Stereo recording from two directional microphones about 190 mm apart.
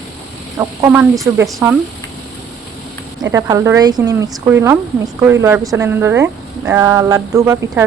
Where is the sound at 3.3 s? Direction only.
15° right (ahead or behind).